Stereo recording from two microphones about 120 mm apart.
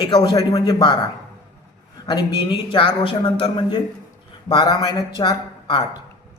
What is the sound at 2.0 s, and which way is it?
Speech, 35° left (ahead or behind).